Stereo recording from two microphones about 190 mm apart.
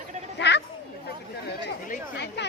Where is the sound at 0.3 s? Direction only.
65° left (ahead or behind).